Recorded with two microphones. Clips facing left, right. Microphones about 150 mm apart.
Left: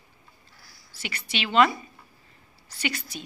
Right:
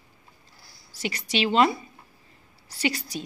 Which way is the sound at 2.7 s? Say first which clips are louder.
Right 4 dB; 35° right (ahead or behind).